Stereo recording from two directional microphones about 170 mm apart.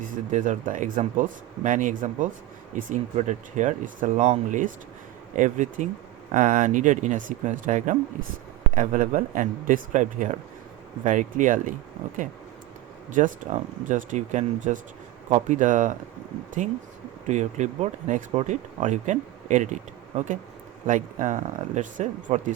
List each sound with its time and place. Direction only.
0.3 s speech: 45° right (ahead or behind)
13.1 s speech: 50° right (ahead or behind)